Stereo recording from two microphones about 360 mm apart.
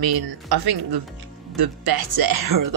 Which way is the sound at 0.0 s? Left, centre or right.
Right.